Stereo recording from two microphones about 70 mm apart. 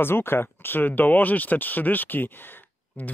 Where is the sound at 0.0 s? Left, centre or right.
Left.